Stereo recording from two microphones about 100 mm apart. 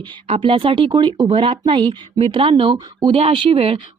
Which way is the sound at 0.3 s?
60° right (ahead or behind).